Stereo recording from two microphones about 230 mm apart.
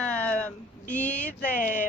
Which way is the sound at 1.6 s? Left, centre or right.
Left.